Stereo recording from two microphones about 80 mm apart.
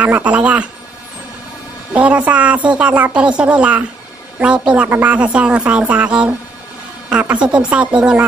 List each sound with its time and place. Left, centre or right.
0.0 s speech: centre
2.0 s a woman's voice: centre